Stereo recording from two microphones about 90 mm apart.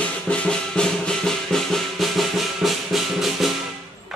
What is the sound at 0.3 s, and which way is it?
Music, 10° left (ahead or behind).